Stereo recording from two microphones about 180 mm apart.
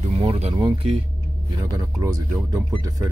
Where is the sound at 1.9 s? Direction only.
20° right (ahead or behind).